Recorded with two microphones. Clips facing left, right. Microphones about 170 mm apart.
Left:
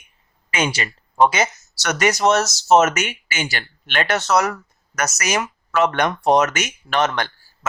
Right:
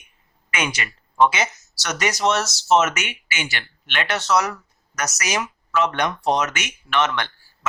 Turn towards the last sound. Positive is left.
turn(degrees=40)  # may be behind; listen again after turning